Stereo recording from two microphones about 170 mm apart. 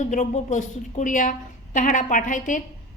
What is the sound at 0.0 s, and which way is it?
Speech, 45° left (ahead or behind).